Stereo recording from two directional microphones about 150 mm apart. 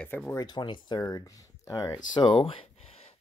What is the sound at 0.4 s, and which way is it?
Speech, 30° left (ahead or behind).